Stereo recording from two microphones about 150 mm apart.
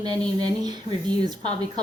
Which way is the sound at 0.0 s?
25° right (ahead or behind).